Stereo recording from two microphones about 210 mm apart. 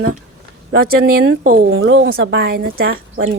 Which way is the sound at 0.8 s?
45° right (ahead or behind).